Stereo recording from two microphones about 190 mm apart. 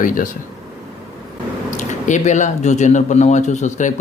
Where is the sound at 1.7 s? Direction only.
40° left (ahead or behind).